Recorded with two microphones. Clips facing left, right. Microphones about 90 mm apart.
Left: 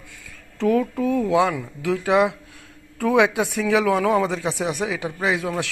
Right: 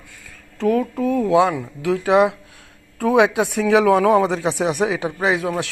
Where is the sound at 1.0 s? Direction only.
35° right (ahead or behind).